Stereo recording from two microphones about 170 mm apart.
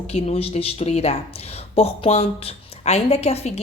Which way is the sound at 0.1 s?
40° left (ahead or behind).